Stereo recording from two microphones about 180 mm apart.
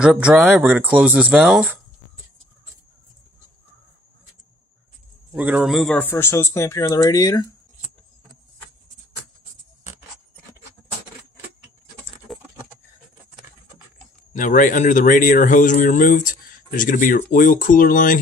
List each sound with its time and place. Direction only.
0.0 s speech: 5° right (ahead or behind)
5.3 s a man's voice: 10° right (ahead or behind)
5.9 s speech: 10° left (ahead or behind)
12.3 s patter: centre (ahead or behind)
14.3 s a man's voice: 45° left (ahead or behind)